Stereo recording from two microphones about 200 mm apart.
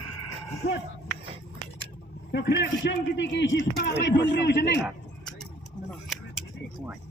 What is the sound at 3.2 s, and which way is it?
Speech, 65° left (ahead or behind).